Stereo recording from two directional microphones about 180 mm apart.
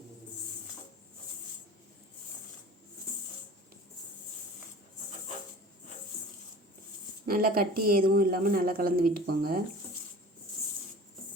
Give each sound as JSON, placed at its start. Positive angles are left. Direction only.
{"t": 7.3, "sound": "speech", "side_deg": -55}